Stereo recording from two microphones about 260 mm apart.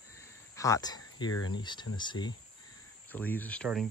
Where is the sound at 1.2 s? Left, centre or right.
Centre.